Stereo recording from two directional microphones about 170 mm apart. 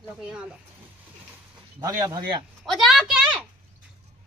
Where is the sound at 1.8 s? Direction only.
20° right (ahead or behind).